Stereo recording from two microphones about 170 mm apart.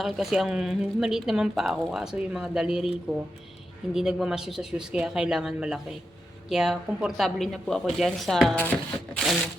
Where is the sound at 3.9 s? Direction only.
5° right (ahead or behind).